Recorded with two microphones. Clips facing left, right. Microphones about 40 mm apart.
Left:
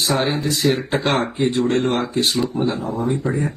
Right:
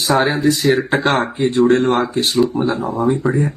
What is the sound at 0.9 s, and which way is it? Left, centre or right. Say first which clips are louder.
Speech: right 3 dB; right.